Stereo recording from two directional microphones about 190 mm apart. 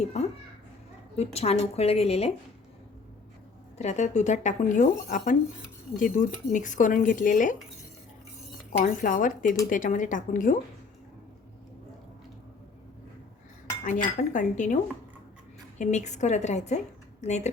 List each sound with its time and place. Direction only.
0.0 s a child's voice: 35° left (ahead or behind)
3.8 s a woman's voice: 35° left (ahead or behind)
8.8 s speech: 45° left (ahead or behind)
13.8 s a woman's voice: 45° left (ahead or behind)
15.8 s a woman's voice: 40° left (ahead or behind)